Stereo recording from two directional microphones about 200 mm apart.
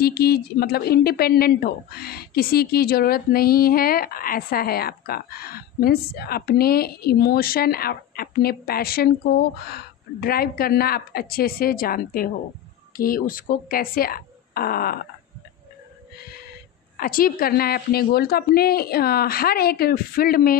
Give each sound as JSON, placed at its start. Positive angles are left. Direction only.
{"t": 0.0, "sound": "a woman's voice", "side_deg": 50}
{"t": 16.9, "sound": "a woman's voice", "side_deg": 45}